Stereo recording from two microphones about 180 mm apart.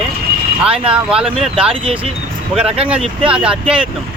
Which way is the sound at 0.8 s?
5° right (ahead or behind).